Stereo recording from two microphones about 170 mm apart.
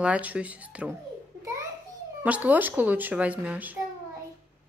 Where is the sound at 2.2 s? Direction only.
10° right (ahead or behind).